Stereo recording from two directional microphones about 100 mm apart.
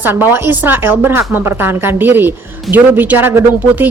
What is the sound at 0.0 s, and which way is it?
A woman's voice, 20° right (ahead or behind).